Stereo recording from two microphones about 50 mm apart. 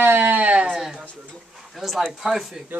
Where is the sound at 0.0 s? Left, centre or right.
Right.